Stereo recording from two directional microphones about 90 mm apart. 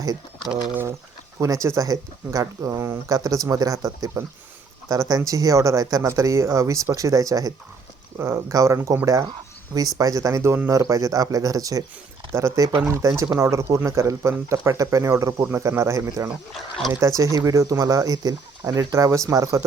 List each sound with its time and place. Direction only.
0.7 s speech: 25° right (ahead or behind)
1.4 s speech: 35° right (ahead or behind)
10.0 s speech: 40° right (ahead or behind)
16.6 s speech: 5° left (ahead or behind)
17.0 s speech: 35° right (ahead or behind)